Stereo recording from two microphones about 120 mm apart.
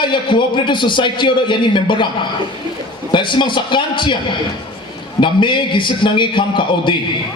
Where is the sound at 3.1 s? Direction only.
40° left (ahead or behind).